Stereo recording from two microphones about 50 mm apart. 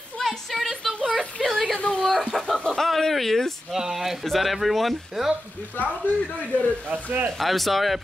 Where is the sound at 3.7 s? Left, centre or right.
Centre.